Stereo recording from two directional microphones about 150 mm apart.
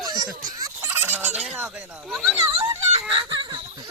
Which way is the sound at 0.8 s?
15° right (ahead or behind).